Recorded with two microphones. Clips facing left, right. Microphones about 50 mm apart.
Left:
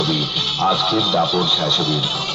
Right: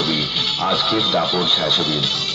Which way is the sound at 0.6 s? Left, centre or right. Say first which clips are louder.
Left 2 dB; centre.